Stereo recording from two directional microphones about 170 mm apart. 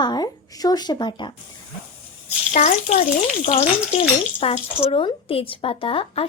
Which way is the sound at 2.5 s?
45° left (ahead or behind).